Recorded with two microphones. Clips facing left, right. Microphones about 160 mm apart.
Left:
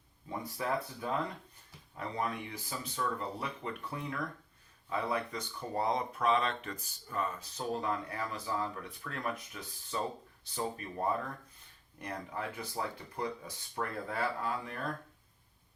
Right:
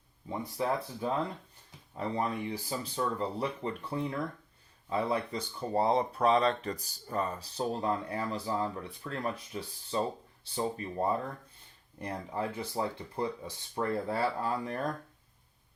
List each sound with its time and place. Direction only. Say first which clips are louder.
0.3 s speech: right 3 dB; 25° right (ahead or behind)
11.9 s speech: right 4 dB; 30° right (ahead or behind)